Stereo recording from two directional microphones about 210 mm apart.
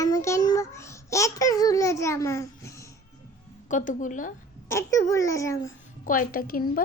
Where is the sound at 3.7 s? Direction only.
35° left (ahead or behind).